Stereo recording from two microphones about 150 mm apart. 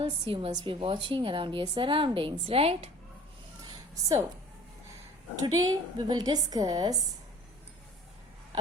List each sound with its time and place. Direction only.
0.0 s a woman's voice: 35° right (ahead or behind)
5.4 s a woman's voice: 25° right (ahead or behind)